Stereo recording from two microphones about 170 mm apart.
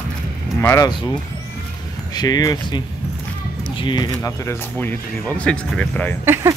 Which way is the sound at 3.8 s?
25° left (ahead or behind).